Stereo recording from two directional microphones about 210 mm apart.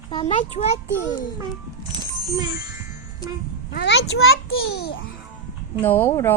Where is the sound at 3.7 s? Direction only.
55° left (ahead or behind).